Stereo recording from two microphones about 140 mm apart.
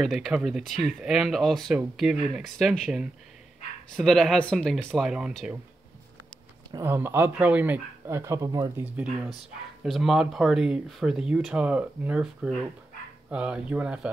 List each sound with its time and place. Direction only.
0.0 s speech: centre (ahead or behind)
6.7 s speech: 20° right (ahead or behind)
8.8 s speech: 10° right (ahead or behind)